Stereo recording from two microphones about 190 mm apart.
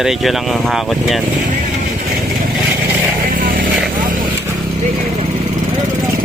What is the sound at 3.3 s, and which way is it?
Vehicle, 50° right (ahead or behind).